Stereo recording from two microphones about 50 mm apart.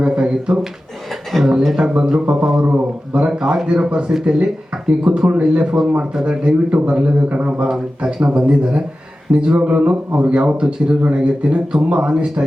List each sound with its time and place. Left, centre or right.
0.0 s speech: centre
1.3 s speech: centre
1.9 s speech: right
2.6 s speech: right
3.2 s speech: centre
6.7 s speech: right